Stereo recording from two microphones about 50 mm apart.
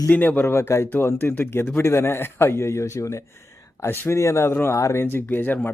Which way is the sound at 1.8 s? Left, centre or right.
Left.